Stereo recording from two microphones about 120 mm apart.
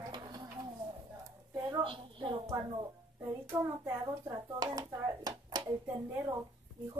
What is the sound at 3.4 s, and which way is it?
Speech, 25° right (ahead or behind).